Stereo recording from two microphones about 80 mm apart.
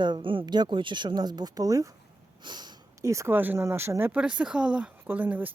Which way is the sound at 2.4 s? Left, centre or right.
Right.